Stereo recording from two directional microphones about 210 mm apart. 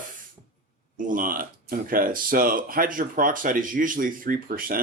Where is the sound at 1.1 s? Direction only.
40° right (ahead or behind).